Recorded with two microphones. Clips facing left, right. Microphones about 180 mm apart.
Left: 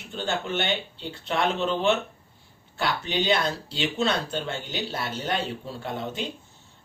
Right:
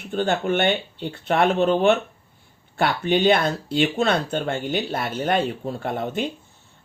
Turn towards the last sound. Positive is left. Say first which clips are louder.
# right 6 dB
turn(degrees=-55)  # may be behind; listen again after turning